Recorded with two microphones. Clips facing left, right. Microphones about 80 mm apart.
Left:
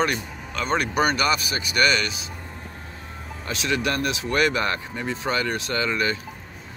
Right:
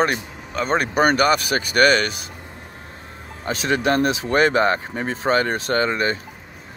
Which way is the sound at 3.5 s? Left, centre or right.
Right.